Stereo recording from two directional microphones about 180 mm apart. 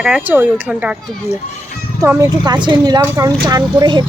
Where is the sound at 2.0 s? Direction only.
20° right (ahead or behind).